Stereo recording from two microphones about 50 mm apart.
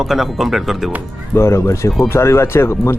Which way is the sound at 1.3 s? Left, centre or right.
Left.